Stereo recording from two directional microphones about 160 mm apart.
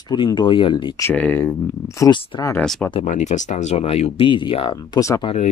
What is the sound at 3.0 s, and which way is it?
Speech, 45° left (ahead or behind).